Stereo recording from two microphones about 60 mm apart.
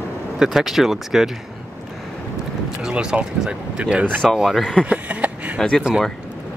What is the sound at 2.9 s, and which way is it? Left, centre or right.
Speech, centre.